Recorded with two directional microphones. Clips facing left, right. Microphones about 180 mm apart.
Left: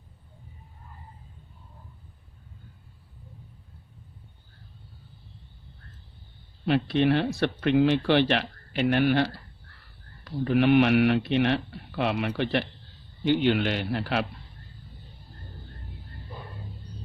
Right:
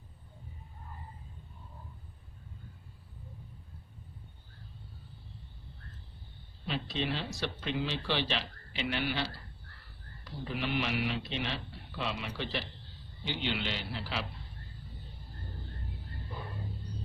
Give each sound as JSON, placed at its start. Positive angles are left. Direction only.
{"t": 6.7, "sound": "speech", "side_deg": 60}
{"t": 10.4, "sound": "a man's voice", "side_deg": 60}